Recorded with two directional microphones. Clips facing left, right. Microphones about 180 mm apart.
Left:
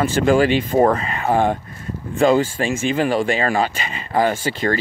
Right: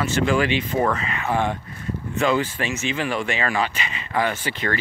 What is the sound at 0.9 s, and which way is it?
Speech, 35° left (ahead or behind).